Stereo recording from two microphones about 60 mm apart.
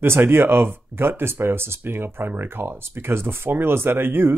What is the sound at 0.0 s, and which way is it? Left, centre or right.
Speech, right.